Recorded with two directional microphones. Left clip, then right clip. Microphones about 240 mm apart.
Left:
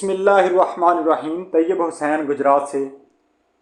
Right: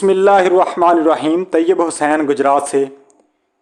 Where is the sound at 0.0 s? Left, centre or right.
Right.